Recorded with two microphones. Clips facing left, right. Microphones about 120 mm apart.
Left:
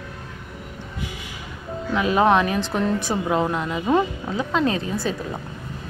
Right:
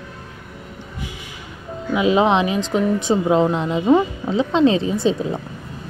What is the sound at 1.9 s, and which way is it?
Speech, 20° right (ahead or behind).